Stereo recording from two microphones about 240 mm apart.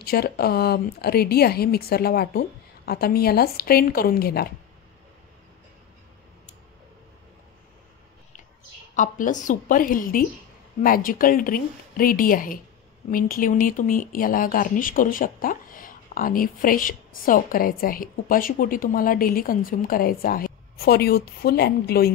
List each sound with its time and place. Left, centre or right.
0.0 s speech: left
8.9 s speech: left